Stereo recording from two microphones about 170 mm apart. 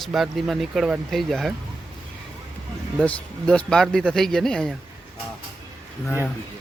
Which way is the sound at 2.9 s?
5° left (ahead or behind).